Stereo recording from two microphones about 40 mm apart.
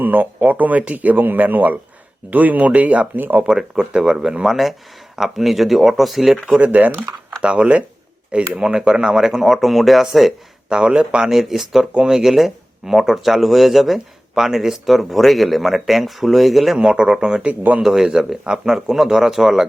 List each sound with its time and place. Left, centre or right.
0.0 s speech: right
3.2 s speech: right
3.6 s speech: right
5.1 s speech: centre
6.6 s speech: right
7.4 s speech: right; by 10.3 s centre
10.7 s speech: right
11.3 s speech: centre
16.7 s speech: right